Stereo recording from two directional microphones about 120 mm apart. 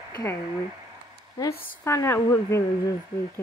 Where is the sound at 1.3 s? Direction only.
25° left (ahead or behind).